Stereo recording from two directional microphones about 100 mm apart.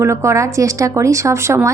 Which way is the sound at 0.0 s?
30° right (ahead or behind).